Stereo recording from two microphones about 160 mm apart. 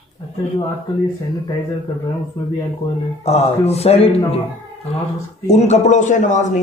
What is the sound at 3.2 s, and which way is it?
Speech, 40° left (ahead or behind).